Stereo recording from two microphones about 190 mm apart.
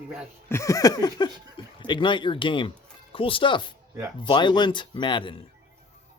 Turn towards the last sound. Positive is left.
turn(degrees=25)  # may be behind; listen again after turning